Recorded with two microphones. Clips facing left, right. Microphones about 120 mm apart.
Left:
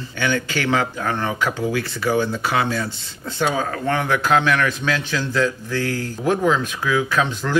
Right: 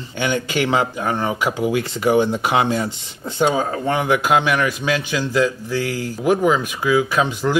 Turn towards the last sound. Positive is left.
turn(degrees=-10)  # may be behind; listen again after turning